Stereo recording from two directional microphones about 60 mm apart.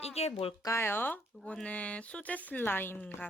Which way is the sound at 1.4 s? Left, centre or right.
Centre.